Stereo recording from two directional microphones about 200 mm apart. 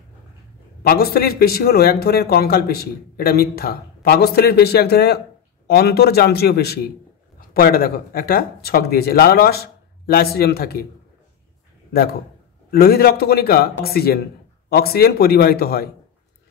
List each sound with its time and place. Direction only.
0.8 s speech: 50° left (ahead or behind)
11.9 s a man's voice: 50° left (ahead or behind)